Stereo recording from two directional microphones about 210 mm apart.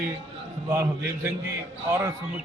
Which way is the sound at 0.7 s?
15° right (ahead or behind).